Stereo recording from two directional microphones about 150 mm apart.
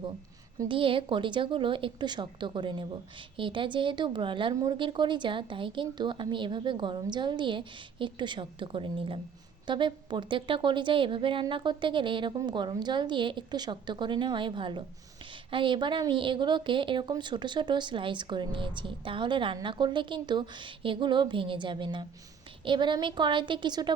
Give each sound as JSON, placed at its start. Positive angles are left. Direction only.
{"t": 0.7, "sound": "a woman's voice", "side_deg": -35}